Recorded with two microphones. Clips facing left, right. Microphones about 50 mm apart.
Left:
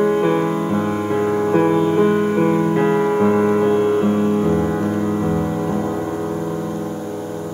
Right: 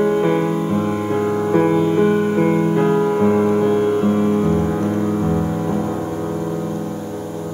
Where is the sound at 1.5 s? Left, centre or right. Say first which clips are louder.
Right 1 dB; centre.